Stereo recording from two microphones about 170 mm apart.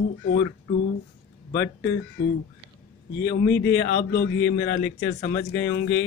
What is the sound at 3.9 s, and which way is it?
Speech, 75° left (ahead or behind).